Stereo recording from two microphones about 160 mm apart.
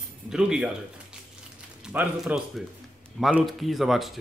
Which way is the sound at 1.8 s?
5° right (ahead or behind).